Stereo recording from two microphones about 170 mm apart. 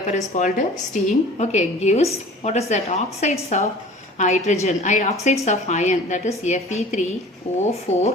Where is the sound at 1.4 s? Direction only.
40° left (ahead or behind).